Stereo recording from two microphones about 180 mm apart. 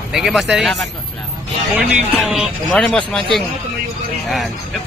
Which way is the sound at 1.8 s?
5° right (ahead or behind).